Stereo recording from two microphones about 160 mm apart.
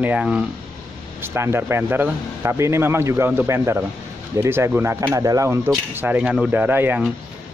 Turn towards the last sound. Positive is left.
turn(degrees=-10)  # may be behind; listen again after turning